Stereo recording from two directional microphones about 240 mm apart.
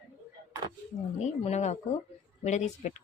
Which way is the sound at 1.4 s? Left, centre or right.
Left.